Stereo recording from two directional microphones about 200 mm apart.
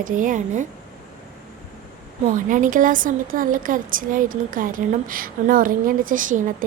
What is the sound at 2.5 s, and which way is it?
A woman's voice, 40° right (ahead or behind).